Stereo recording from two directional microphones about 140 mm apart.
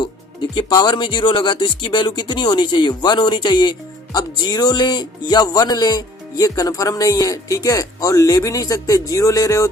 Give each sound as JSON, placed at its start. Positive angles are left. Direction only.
{"t": 0.5, "sound": "speech", "side_deg": 30}